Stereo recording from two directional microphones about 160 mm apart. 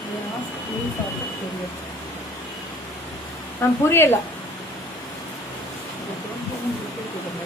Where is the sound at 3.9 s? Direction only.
15° left (ahead or behind).